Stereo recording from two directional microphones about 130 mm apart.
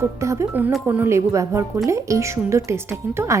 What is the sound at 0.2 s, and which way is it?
Speech, 20° right (ahead or behind).